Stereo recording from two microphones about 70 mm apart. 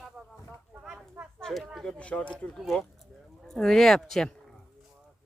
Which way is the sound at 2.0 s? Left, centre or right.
Centre.